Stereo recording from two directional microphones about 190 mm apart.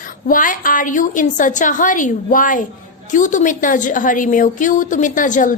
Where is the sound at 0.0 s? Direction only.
45° left (ahead or behind).